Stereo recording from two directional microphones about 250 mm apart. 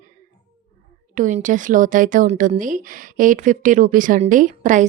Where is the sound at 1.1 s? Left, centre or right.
Right.